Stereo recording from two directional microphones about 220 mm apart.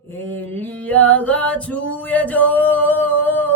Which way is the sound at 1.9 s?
5° left (ahead or behind).